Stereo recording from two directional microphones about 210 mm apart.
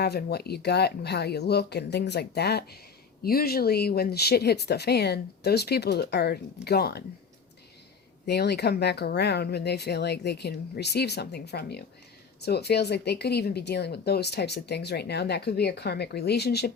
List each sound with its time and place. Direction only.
0.0 s speech: 50° left (ahead or behind)
8.3 s speech: 50° left (ahead or behind)